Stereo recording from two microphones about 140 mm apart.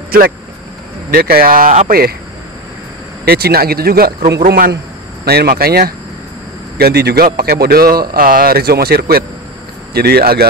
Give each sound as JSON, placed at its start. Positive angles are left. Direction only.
{"t": 0.1, "sound": "a man's voice", "side_deg": -90}
{"t": 3.3, "sound": "a man's voice", "side_deg": -90}